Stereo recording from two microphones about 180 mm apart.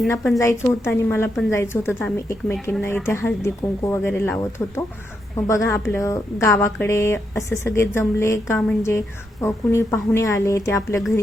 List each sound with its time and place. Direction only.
0.3 s speech: 15° left (ahead or behind)